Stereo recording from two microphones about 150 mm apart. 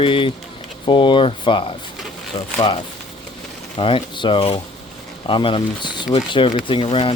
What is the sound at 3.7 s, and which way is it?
Speech, 35° left (ahead or behind).